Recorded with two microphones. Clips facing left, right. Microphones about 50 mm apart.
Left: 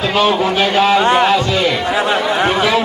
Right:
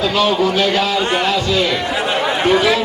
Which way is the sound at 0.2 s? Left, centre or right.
Left.